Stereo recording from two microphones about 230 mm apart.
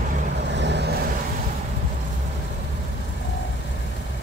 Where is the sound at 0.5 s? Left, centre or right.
Right.